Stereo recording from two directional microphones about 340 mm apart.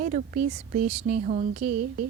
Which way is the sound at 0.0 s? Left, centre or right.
Right.